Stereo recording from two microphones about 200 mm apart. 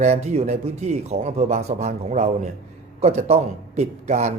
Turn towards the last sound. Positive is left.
turn(degrees=-35)  # may be behind; listen again after turning